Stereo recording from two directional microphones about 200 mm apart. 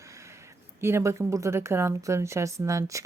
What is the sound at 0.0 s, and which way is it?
Speech, 15° right (ahead or behind).